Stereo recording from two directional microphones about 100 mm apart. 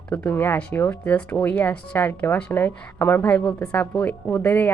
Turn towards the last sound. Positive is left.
turn(degrees=20)  # may be behind; listen again after turning